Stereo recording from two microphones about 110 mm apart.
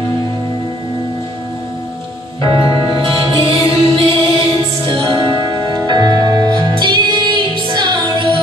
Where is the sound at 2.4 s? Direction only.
50° right (ahead or behind).